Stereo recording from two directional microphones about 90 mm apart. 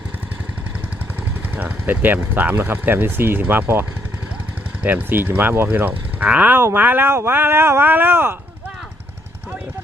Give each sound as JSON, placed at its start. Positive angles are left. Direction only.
{"t": 1.5, "sound": "speech", "side_deg": -20}